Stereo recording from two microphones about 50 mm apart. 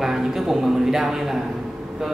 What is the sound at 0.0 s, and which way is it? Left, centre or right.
A man's voice, centre.